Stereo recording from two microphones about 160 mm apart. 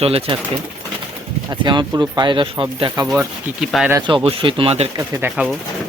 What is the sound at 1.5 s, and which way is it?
Speech, 30° right (ahead or behind).